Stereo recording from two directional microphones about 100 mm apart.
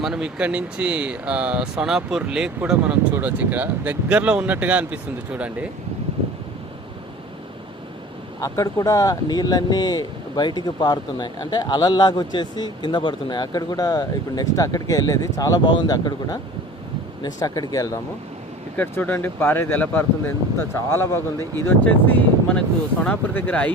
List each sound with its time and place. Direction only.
0.0 s speech: 5° right (ahead or behind)
2.8 s speech: 15° right (ahead or behind)
8.4 s speech: 35° left (ahead or behind)
18.8 s speech: 20° left (ahead or behind)